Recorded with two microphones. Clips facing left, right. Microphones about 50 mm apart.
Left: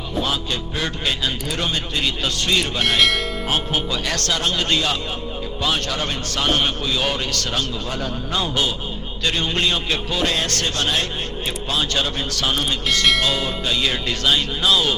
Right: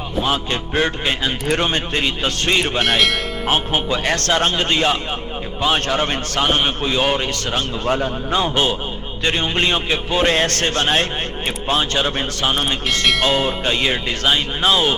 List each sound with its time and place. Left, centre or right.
0.3 s a man's voice: right
6.4 s a man's voice: right